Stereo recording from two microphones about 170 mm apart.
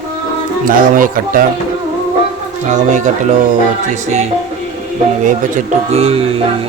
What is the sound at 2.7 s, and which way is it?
Speech, 45° right (ahead or behind).